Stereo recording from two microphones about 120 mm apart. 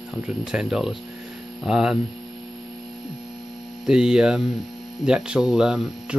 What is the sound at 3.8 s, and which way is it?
Speech, 5° right (ahead or behind).